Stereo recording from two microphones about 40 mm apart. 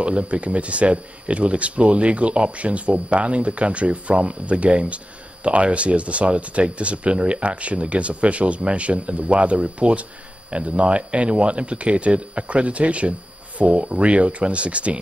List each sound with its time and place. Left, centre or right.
0.0 s speech: right